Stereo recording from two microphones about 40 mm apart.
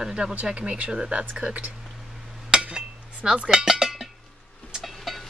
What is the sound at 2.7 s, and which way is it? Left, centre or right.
Dishes, centre.